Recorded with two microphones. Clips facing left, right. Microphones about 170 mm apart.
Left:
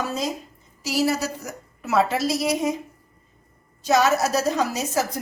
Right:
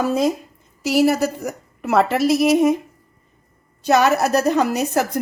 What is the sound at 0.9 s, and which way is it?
Speech, 60° right (ahead or behind).